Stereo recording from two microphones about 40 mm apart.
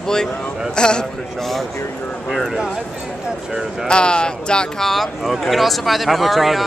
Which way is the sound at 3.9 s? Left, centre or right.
Left.